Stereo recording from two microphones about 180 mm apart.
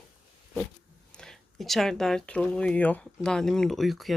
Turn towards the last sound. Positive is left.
turn(degrees=0)  # may be behind; listen again after turning